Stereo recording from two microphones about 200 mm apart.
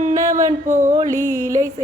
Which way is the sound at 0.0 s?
35° right (ahead or behind).